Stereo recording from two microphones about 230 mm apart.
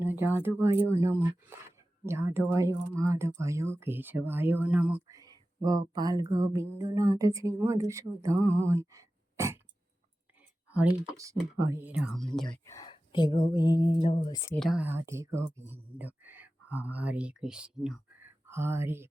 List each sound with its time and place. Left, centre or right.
0.0 s speech: centre
10.7 s speech: centre
12.5 s speech: centre
13.4 s music: centre
14.3 s speech: centre
14.6 s speech: centre